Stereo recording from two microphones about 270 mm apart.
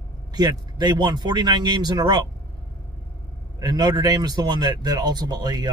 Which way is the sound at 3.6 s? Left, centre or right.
Centre.